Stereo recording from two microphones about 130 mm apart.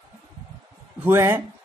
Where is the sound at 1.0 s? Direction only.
20° right (ahead or behind).